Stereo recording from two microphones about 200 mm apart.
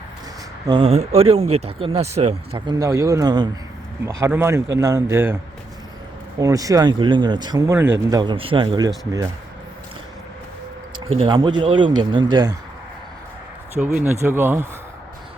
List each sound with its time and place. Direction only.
0.7 s speech: 30° right (ahead or behind)
2.6 s speech: 20° right (ahead or behind)
6.4 s speech: 15° right (ahead or behind)
8.1 s speech: 20° right (ahead or behind)
11.1 s speech: 30° right (ahead or behind)
13.9 s speech: 10° right (ahead or behind)